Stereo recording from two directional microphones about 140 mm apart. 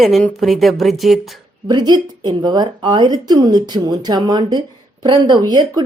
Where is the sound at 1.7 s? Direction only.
30° right (ahead or behind).